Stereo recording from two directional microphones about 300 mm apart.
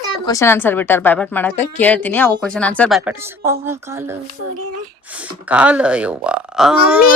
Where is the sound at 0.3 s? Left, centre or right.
Centre.